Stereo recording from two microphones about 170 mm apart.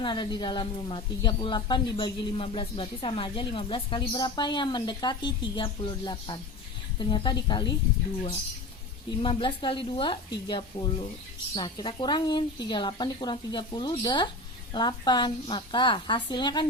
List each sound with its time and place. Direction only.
0.0 s speech: 25° left (ahead or behind)
9.2 s speech: 30° left (ahead or behind)